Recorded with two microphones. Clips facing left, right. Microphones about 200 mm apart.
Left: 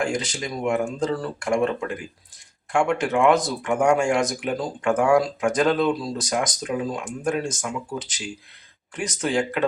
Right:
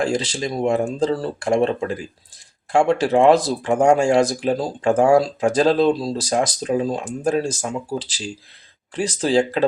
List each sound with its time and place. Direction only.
0.0 s speech: 30° right (ahead or behind)